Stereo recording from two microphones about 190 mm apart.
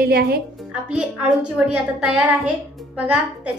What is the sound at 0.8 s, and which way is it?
Speech, 5° right (ahead or behind).